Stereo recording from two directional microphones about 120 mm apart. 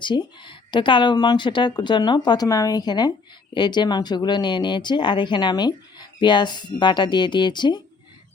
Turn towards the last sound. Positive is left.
turn(degrees=40)  # may be behind; listen again after turning